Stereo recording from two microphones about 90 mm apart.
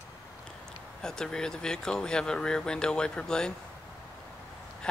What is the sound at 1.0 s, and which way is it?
Speech, 5° left (ahead or behind).